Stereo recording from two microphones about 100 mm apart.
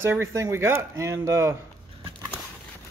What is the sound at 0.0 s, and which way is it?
Speech, 25° right (ahead or behind).